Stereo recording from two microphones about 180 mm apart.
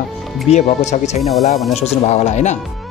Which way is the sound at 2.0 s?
40° left (ahead or behind).